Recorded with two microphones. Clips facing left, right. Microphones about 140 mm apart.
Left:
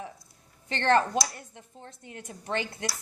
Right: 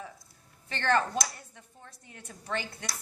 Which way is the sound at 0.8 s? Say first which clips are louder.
Left 4 dB; 25° left (ahead or behind).